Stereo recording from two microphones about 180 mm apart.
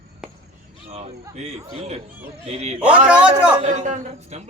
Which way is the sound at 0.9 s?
35° right (ahead or behind).